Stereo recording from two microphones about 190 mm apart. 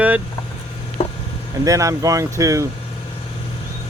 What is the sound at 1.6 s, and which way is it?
Speech, 15° right (ahead or behind).